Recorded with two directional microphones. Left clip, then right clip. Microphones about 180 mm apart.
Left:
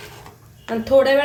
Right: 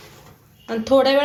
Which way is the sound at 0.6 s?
35° right (ahead or behind).